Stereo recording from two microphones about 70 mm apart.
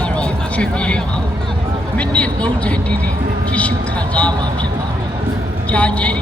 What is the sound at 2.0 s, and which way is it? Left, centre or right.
Speech, centre.